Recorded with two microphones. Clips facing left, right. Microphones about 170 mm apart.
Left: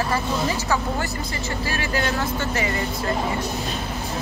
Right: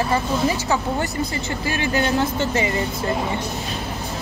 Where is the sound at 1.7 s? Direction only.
20° right (ahead or behind).